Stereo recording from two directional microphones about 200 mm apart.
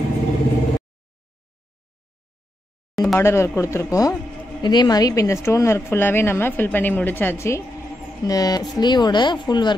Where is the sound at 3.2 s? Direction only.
15° left (ahead or behind).